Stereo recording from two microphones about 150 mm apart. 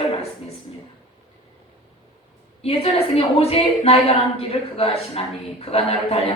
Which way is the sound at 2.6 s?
40° left (ahead or behind).